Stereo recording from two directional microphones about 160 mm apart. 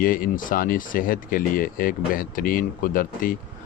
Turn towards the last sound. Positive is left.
turn(degrees=60)  # may be behind; listen again after turning